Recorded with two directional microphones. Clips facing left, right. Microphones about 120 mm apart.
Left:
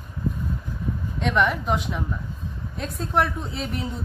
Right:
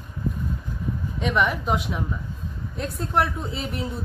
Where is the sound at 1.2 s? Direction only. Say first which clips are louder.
Left 1 dB; 5° right (ahead or behind).